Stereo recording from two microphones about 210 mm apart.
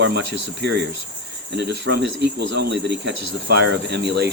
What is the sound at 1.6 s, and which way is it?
Speech, 50° right (ahead or behind).